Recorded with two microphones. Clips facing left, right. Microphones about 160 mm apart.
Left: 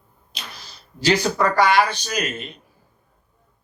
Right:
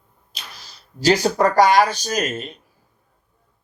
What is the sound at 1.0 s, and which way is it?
Speech, 40° right (ahead or behind).